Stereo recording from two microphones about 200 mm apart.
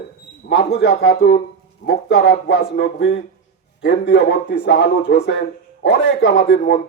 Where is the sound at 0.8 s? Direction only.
55° left (ahead or behind).